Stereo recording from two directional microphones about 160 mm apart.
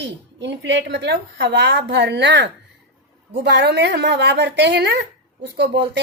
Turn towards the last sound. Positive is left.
turn(degrees=-90)